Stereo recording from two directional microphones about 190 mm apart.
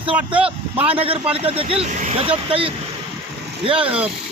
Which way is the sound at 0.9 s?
30° right (ahead or behind).